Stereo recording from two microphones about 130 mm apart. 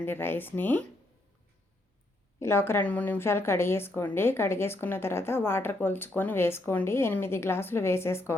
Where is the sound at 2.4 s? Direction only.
20° left (ahead or behind).